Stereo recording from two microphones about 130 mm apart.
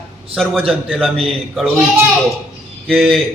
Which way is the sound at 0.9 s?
5° left (ahead or behind).